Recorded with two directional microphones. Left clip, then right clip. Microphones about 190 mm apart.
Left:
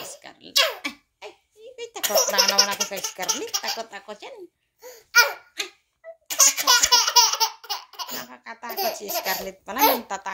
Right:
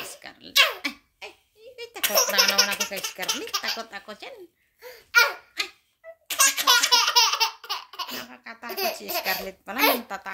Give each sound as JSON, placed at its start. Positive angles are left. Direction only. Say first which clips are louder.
{"t": 0.0, "sound": "a sound", "louder": "even", "side_deg": -25}
{"t": 1.6, "sound": "baby laughter", "louder": "right 1 dB", "side_deg": -20}
{"t": 6.2, "sound": "laughter", "louder": "left 1 dB", "side_deg": -20}